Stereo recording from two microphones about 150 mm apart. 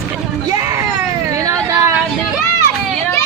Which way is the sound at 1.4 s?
20° right (ahead or behind).